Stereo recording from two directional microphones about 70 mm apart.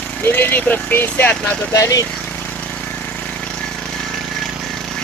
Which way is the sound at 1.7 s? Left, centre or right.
Left.